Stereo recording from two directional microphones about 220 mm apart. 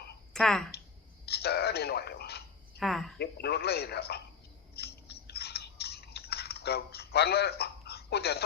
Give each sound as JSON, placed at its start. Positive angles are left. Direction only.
{"t": 0.3, "sound": "speech", "side_deg": 5}
{"t": 1.2, "sound": "speech", "side_deg": 45}
{"t": 2.7, "sound": "a sound", "side_deg": 0}
{"t": 3.2, "sound": "a man's voice", "side_deg": 45}
{"t": 4.7, "sound": "chewing", "side_deg": 45}